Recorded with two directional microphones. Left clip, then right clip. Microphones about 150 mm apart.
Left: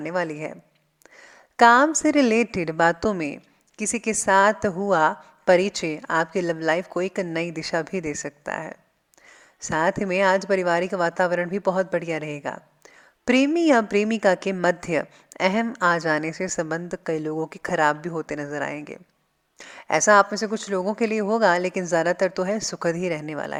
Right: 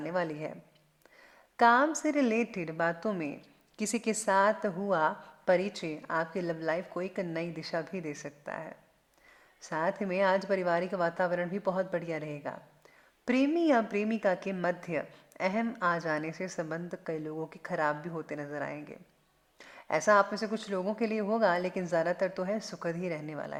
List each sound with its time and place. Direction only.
0.0 s a woman's voice: 30° left (ahead or behind)
3.8 s a woman's voice: 25° left (ahead or behind); by 23.6 s 45° left (ahead or behind)